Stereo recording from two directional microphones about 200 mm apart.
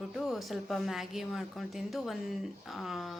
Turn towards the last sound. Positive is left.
turn(degrees=0)  # may be behind; listen again after turning